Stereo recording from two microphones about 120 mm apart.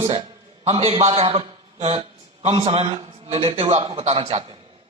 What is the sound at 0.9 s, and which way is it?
A man's voice, 65° right (ahead or behind).